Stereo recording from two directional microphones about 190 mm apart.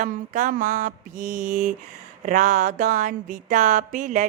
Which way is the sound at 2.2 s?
40° right (ahead or behind).